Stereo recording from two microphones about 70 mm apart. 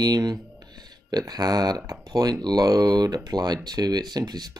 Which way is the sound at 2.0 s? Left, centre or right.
Right.